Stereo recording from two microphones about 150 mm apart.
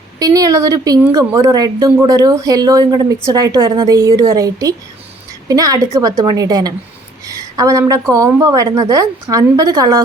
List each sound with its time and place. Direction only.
0.2 s a woman's voice: 25° right (ahead or behind)